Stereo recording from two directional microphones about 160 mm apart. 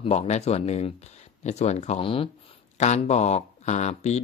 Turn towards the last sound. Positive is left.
turn(degrees=45)  # may be behind; listen again after turning